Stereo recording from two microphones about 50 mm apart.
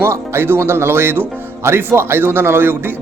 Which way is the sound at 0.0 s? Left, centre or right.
Right.